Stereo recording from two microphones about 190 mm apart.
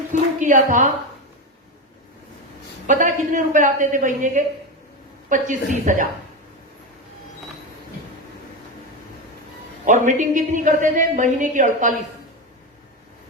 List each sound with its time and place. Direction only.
0.1 s a woman's voice: 40° right (ahead or behind)
2.8 s a man's voice: 40° right (ahead or behind)
9.8 s a woman's voice: 40° right (ahead or behind)